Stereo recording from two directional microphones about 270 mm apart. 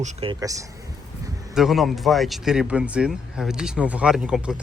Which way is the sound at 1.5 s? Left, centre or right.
Centre.